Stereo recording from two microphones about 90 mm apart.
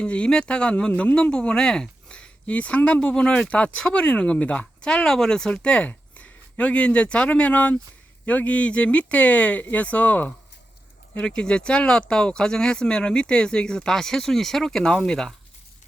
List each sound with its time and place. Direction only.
0.0 s speech: 10° left (ahead or behind)